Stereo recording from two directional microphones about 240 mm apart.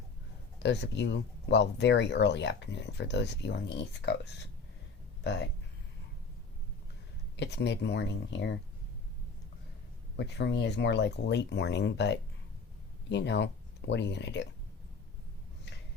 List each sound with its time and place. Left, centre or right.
0.6 s speech: left
7.3 s speech: left
10.2 s speech: left